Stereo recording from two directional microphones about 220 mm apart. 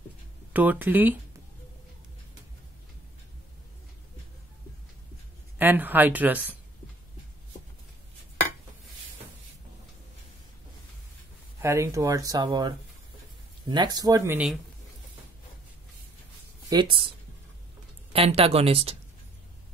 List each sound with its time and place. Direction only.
0.5 s speech: 5° right (ahead or behind)
5.6 s speech: 10° right (ahead or behind)
11.6 s speech: 15° right (ahead or behind)
16.7 s speech: 15° right (ahead or behind)
18.1 s speech: 25° right (ahead or behind)